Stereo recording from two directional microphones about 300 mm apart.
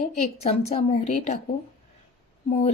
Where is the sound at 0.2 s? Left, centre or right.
Left.